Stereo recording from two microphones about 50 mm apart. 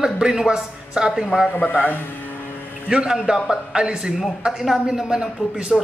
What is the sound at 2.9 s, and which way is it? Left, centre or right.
Speech, centre.